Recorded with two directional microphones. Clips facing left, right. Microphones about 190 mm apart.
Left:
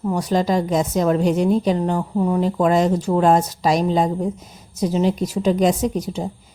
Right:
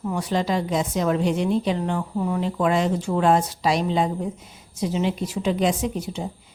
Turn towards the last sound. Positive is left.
turn(degrees=40)  # may be behind; listen again after turning